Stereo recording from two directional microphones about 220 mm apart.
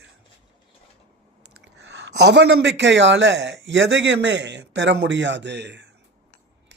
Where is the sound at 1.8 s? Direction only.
50° right (ahead or behind).